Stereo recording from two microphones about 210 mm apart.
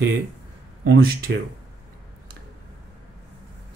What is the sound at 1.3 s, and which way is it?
Speech, 50° right (ahead or behind).